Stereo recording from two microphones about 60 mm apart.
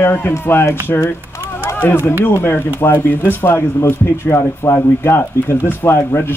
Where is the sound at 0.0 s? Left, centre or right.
Left.